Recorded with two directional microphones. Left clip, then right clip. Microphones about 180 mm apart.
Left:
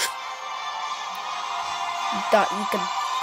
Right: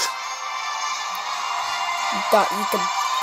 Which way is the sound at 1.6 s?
5° right (ahead or behind).